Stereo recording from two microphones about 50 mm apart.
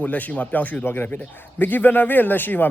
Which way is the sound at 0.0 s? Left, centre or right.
Left.